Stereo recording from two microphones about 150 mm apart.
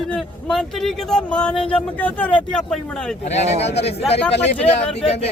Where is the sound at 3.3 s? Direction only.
45° left (ahead or behind).